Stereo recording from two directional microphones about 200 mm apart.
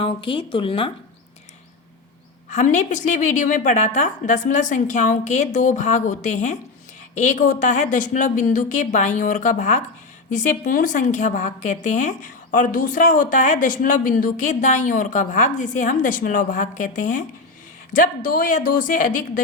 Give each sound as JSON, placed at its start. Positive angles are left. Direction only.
{"t": 0.0, "sound": "speech", "side_deg": 25}
{"t": 2.5, "sound": "a woman's voice", "side_deg": 35}